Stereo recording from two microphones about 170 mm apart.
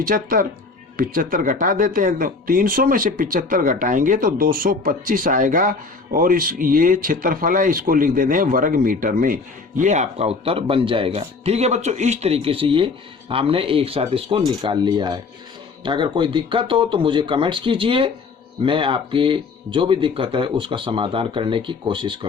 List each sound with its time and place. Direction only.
0.0 s speech: 55° right (ahead or behind); by 22.3 s 30° right (ahead or behind)